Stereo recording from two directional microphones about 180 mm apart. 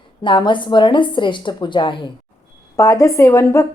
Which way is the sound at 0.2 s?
25° left (ahead or behind).